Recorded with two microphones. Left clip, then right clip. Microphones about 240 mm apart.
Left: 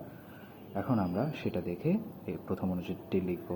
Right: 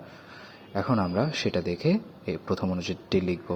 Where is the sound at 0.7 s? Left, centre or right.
Right.